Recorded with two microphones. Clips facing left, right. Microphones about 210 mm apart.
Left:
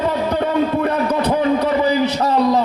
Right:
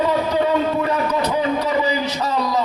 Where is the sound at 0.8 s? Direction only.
55° left (ahead or behind).